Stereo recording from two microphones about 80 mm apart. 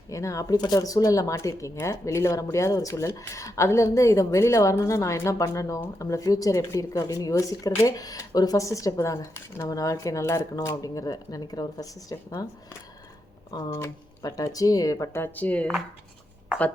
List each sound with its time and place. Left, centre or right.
0.1 s speech: left
0.5 s speech: left
13.7 s speech: left
15.2 s speech: centre